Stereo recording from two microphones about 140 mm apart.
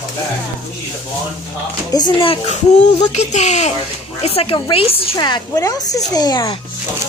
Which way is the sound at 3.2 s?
55° left (ahead or behind).